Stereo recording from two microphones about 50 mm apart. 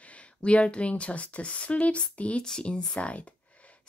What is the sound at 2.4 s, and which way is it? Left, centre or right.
Speech, centre.